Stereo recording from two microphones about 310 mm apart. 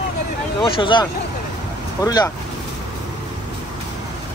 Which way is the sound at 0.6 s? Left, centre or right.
Centre.